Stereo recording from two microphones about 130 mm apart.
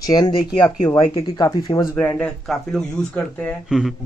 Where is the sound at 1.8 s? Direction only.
15° left (ahead or behind).